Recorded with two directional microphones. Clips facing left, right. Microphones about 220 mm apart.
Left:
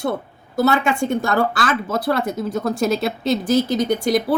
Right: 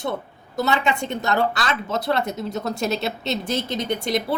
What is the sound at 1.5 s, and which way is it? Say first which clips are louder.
Speech: left 4 dB; 5° left (ahead or behind).